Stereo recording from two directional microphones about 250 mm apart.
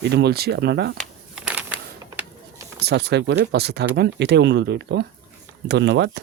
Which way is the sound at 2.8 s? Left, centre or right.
Right.